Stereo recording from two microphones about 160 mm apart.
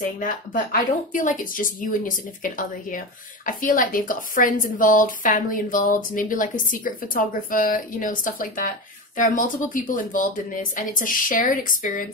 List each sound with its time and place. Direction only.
0.2 s a woman's voice: 60° left (ahead or behind)